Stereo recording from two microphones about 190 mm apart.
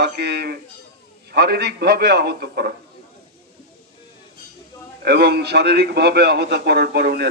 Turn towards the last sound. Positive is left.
turn(degrees=-60)  # may be behind; listen again after turning